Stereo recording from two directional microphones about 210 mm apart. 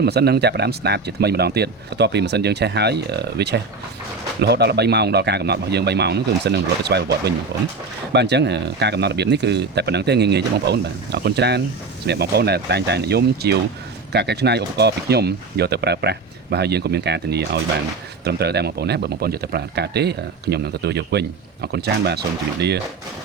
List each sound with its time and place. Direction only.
0.0 s speech: 50° right (ahead or behind)